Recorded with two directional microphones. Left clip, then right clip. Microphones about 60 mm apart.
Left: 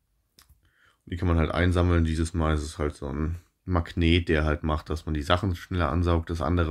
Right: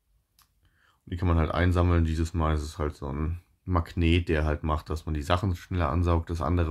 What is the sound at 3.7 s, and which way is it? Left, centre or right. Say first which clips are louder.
Speech: left 2 dB; centre.